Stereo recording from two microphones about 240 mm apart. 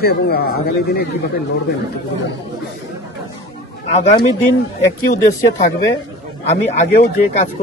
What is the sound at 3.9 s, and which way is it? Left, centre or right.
Speech, left.